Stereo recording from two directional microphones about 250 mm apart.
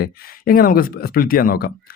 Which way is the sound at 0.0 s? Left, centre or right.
Left.